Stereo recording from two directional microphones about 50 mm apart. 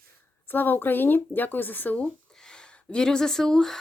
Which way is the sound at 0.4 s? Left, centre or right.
Left.